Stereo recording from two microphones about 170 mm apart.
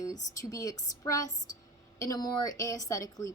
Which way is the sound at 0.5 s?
20° left (ahead or behind).